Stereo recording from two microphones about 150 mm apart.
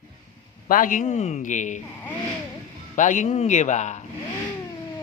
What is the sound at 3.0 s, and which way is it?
Speech, 55° left (ahead or behind).